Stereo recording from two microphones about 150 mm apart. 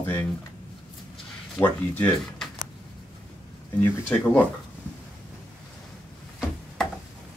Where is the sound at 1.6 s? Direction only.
10° left (ahead or behind).